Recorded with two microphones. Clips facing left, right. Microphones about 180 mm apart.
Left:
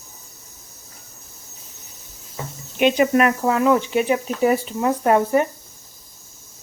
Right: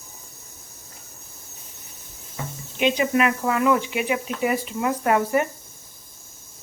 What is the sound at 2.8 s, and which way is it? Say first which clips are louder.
Speech: left 4 dB; 55° left (ahead or behind).